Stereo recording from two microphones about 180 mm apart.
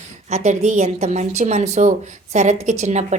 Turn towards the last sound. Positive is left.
turn(degrees=-40)  # may be behind; listen again after turning